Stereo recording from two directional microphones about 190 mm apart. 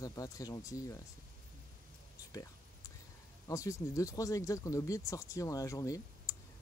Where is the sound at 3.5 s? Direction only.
15° left (ahead or behind).